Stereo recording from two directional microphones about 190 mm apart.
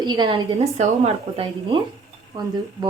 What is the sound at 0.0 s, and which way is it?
A woman's voice, 25° right (ahead or behind).